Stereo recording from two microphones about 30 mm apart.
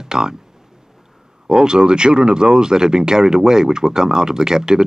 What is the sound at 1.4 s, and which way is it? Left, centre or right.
Speech, right.